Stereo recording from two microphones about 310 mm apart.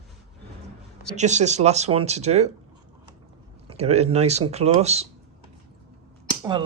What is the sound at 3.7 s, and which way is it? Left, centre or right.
Speech, right.